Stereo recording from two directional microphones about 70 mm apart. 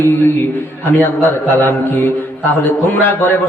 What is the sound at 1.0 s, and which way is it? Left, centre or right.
Speech, left.